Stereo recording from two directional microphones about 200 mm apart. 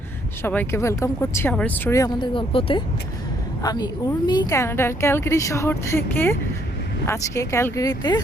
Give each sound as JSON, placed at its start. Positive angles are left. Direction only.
{"t": 0.4, "sound": "speech", "side_deg": 10}